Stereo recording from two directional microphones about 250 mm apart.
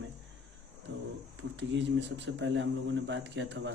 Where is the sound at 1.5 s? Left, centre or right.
Right.